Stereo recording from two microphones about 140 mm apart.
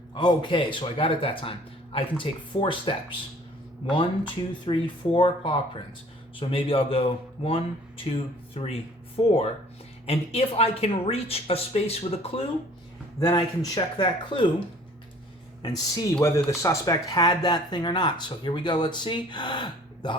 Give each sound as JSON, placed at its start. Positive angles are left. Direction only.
{"t": 0.1, "sound": "speech", "side_deg": 35}
{"t": 3.9, "sound": "speech", "side_deg": 35}
{"t": 13.1, "sound": "speech", "side_deg": 25}
{"t": 15.6, "sound": "speech", "side_deg": 25}